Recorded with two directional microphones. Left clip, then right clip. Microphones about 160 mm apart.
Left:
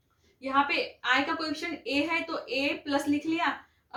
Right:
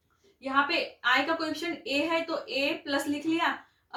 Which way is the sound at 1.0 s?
15° left (ahead or behind).